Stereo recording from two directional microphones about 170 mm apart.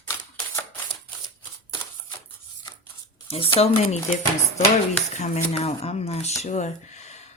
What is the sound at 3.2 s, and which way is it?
Speech, 35° left (ahead or behind).